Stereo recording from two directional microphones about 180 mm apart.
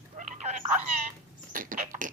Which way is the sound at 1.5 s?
50° right (ahead or behind).